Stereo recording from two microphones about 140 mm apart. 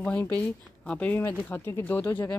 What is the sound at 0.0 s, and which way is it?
Speech, 10° left (ahead or behind).